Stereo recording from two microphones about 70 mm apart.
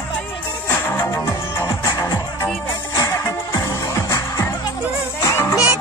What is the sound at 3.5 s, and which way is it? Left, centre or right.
Music, left.